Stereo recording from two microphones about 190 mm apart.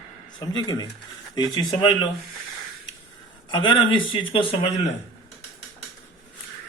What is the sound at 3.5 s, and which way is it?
Speech, 25° left (ahead or behind).